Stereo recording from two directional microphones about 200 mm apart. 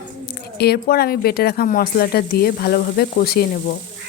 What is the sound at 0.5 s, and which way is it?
Speech, 50° left (ahead or behind).